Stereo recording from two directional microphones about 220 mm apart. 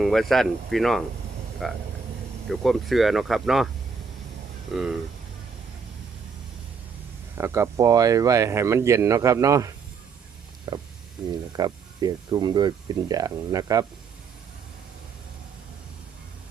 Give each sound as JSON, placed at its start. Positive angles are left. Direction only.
{"t": 0.0, "sound": "speech", "side_deg": 0}
{"t": 4.7, "sound": "speech", "side_deg": 0}
{"t": 7.3, "sound": "speech", "side_deg": -10}